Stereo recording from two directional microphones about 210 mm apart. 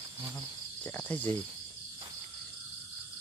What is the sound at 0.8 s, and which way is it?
Speech, 10° left (ahead or behind).